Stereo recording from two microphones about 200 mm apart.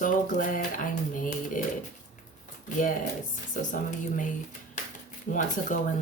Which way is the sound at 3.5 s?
45° left (ahead or behind).